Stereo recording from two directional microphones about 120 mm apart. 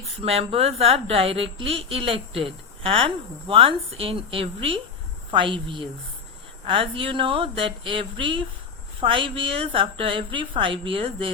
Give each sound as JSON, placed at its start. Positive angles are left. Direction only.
{"t": 0.2, "sound": "a woman's voice", "side_deg": -55}